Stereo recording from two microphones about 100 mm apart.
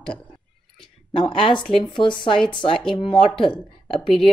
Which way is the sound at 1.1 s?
55° left (ahead or behind).